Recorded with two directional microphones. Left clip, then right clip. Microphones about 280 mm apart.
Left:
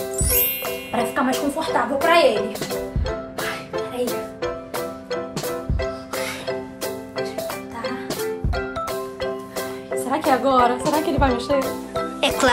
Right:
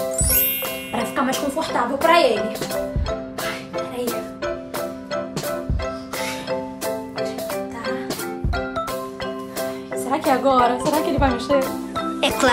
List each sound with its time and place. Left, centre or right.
0.1 s music: centre
9.6 s speech: centre